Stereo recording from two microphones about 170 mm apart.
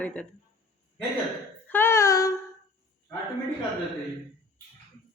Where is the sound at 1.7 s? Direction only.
15° left (ahead or behind).